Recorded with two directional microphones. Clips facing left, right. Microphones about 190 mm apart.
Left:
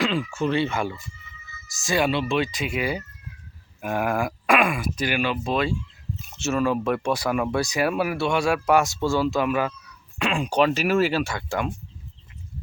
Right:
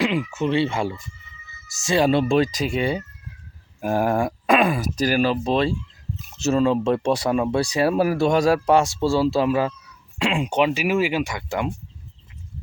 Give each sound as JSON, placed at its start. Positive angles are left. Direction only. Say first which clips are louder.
{"t": 0.0, "sound": "speech", "louder": "right 2 dB", "side_deg": -20}
{"t": 2.0, "sound": "speech", "louder": "right 5 dB", "side_deg": -45}
{"t": 3.8, "sound": "groan", "louder": "right 4 dB", "side_deg": -35}
{"t": 4.7, "sound": "speech", "louder": "right 4 dB", "side_deg": -40}